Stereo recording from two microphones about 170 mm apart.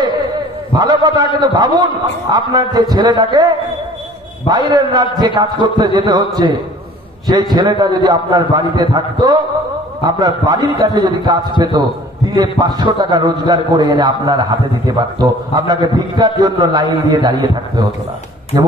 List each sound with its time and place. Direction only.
0.7 s a man's voice: 25° right (ahead or behind)